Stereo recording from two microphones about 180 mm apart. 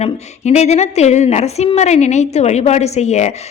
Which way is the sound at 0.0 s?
40° left (ahead or behind).